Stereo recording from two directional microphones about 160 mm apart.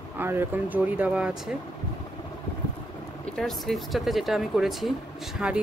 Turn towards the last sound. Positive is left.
turn(degrees=-5)  # may be behind; listen again after turning